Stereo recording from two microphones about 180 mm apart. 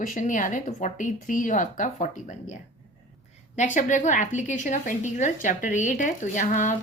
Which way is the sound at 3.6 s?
45° left (ahead or behind).